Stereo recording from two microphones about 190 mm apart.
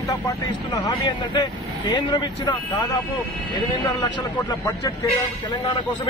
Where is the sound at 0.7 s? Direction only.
25° left (ahead or behind).